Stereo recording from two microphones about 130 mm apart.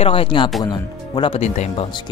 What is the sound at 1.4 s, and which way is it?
Speech, 60° left (ahead or behind).